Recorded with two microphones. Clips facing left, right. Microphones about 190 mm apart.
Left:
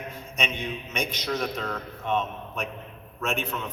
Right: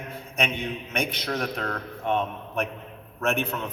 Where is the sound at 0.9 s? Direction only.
60° right (ahead or behind).